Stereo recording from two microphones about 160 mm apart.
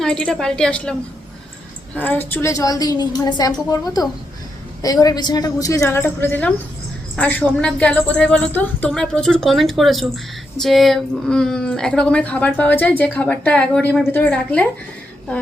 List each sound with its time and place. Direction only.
0.0 s a woman's voice: 5° left (ahead or behind)
2.0 s a woman's voice: 10° left (ahead or behind)